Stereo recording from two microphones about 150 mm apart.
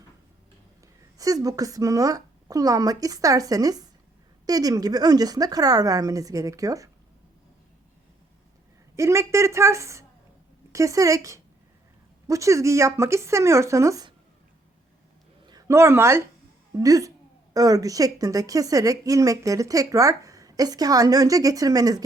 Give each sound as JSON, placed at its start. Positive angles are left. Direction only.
{"t": 1.2, "sound": "a woman's voice", "side_deg": -25}
{"t": 9.0, "sound": "a woman's voice", "side_deg": -20}
{"t": 15.4, "sound": "a woman's voice", "side_deg": -25}